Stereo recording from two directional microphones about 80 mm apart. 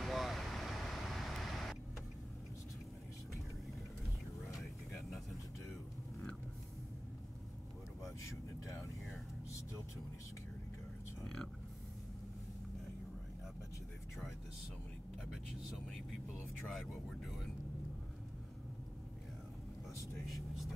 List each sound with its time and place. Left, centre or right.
0.0 s vehicle: centre
8.0 s vehicle: left
11.2 s a sound: centre
16.7 s vehicle: centre
20.2 s vehicle: centre